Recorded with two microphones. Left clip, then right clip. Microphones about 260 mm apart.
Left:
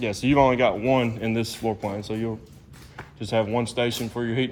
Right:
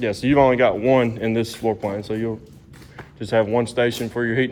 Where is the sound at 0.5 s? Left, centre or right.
Left.